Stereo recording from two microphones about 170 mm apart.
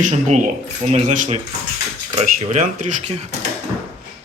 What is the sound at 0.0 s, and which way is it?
Speech, 50° right (ahead or behind).